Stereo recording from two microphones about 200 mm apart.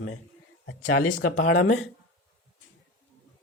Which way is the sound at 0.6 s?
75° left (ahead or behind).